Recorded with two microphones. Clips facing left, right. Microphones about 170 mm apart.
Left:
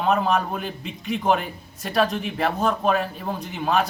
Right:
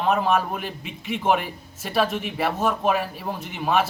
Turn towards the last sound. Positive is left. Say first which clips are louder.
# even
turn(degrees=-5)  # may be behind; listen again after turning